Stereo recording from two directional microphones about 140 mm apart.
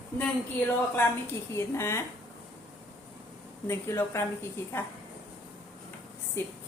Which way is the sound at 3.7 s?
20° left (ahead or behind).